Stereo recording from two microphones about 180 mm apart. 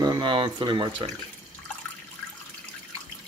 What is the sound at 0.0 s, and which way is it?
Speech, 25° right (ahead or behind).